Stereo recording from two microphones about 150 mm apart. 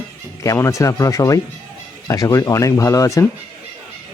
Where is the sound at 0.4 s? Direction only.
20° left (ahead or behind).